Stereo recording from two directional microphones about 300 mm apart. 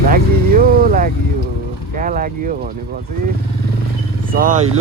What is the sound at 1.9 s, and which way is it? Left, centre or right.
Speech, right.